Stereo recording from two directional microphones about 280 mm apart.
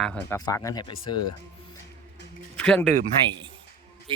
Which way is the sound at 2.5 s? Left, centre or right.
Centre.